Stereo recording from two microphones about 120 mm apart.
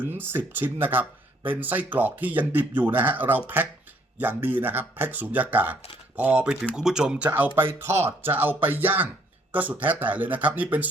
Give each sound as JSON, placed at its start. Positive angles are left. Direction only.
{"t": 0.0, "sound": "speech", "side_deg": -15}